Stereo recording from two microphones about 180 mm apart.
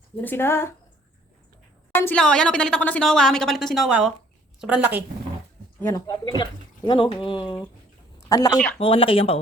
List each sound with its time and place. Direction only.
0.2 s speech: 10° left (ahead or behind)
1.9 s a woman's voice: 10° left (ahead or behind); by 5.0 s 10° right (ahead or behind)
5.9 s speech: 20° left (ahead or behind)
8.8 s speech: 30° left (ahead or behind)